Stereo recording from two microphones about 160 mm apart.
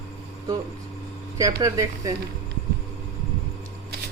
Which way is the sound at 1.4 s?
20° right (ahead or behind).